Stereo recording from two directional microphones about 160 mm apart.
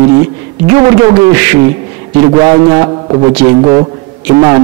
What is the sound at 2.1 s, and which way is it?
A man's voice, 30° right (ahead or behind).